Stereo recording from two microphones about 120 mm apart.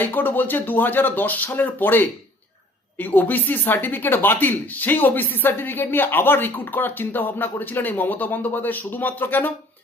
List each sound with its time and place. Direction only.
0.0 s speech: 15° left (ahead or behind)